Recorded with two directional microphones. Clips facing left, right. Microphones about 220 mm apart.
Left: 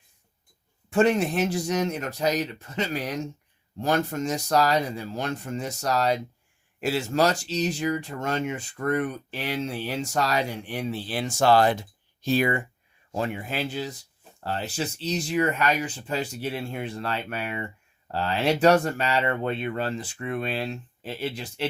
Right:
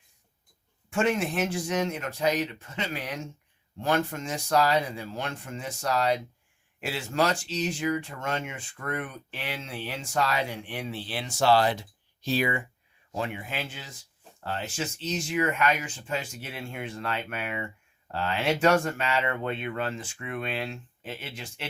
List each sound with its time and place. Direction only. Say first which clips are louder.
0.9 s speech: left 5 dB; 35° left (ahead or behind)